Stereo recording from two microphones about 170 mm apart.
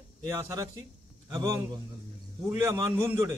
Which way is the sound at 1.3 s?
25° right (ahead or behind).